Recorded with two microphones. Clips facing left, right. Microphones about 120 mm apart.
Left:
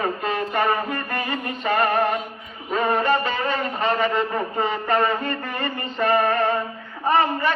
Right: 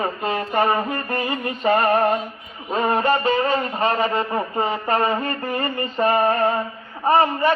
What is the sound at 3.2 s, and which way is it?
A man's voice, 35° right (ahead or behind).